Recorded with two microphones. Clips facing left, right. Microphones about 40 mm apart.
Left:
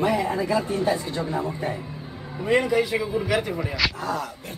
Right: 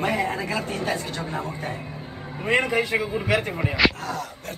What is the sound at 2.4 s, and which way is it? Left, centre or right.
A man's voice, right.